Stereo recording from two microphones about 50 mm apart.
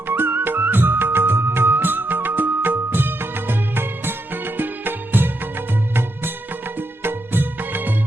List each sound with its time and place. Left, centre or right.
0.1 s music of bollywood: right
6.7 s music: right